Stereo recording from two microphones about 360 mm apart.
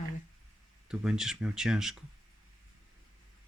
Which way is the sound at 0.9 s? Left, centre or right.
Centre.